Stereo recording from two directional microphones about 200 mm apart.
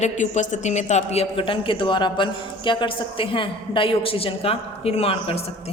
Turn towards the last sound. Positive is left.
turn(degrees=30)  # may be behind; listen again after turning